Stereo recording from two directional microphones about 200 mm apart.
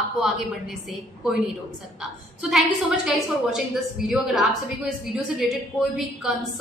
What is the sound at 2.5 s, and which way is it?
A woman's voice, centre (ahead or behind).